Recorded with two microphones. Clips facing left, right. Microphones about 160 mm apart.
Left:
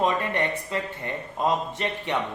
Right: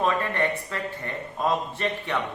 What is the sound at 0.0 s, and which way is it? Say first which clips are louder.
A man's voice: even; 20° left (ahead or behind).